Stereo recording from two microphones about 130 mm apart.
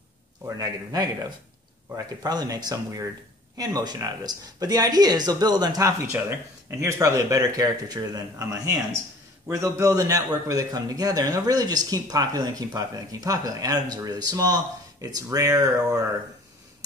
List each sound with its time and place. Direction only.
0.4 s a man's voice: 25° right (ahead or behind)
2.2 s a man's voice: 30° right (ahead or behind)